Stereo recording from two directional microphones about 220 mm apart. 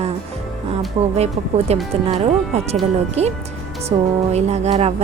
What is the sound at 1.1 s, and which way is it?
Speech, 30° right (ahead or behind).